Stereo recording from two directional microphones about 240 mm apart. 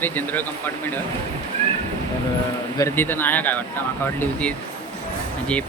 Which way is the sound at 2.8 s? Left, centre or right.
Centre.